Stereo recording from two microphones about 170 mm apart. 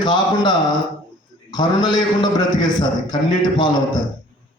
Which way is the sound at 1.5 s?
25° left (ahead or behind).